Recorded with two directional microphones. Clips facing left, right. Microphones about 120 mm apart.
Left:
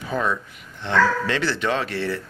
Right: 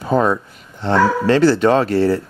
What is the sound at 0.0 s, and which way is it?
Speech, 40° right (ahead or behind).